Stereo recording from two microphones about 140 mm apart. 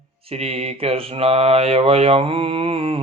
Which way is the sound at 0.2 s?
45° right (ahead or behind).